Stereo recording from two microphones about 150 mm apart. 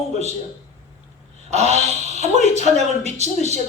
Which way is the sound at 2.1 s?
50° left (ahead or behind).